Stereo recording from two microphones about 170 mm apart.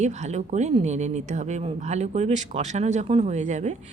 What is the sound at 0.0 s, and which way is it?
Speech, 45° right (ahead or behind).